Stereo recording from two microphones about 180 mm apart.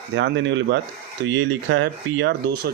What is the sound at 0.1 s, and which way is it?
Speech, 90° right.